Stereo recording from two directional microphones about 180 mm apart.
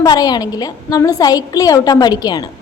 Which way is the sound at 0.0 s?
20° left (ahead or behind).